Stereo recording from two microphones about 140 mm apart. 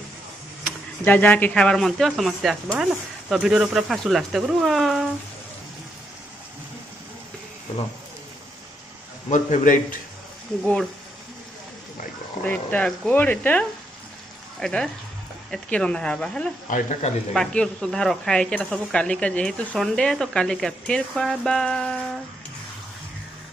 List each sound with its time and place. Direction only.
1.0 s speech: 10° left (ahead or behind)
9.3 s a man's voice: 65° left (ahead or behind)
10.6 s speech: 5° left (ahead or behind)
12.4 s speech: 10° left (ahead or behind)
16.6 s a man's voice: 70° left (ahead or behind)
17.3 s speech: 5° left (ahead or behind)